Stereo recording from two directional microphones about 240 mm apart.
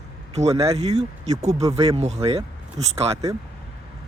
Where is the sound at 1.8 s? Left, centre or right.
Right.